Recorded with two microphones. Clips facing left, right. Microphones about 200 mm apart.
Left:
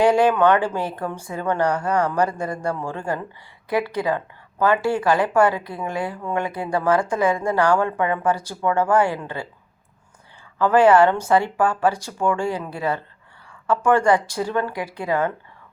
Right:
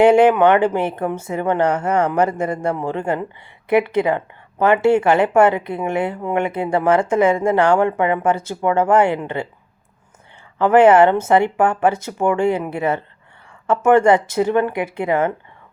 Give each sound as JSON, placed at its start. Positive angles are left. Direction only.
{"t": 0.0, "sound": "speech", "side_deg": -25}
{"t": 10.6, "sound": "speech", "side_deg": -20}